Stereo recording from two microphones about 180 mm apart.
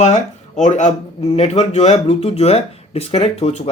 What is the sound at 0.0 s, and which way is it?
Speech, 40° left (ahead or behind).